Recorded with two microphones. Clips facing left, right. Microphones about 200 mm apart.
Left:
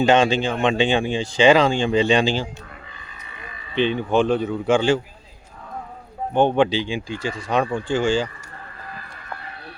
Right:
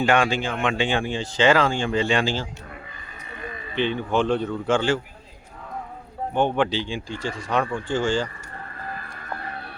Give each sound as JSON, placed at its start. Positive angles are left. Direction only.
{"t": 0.0, "sound": "speech", "side_deg": 20}
{"t": 3.8, "sound": "speech", "side_deg": 15}
{"t": 6.3, "sound": "speech", "side_deg": 15}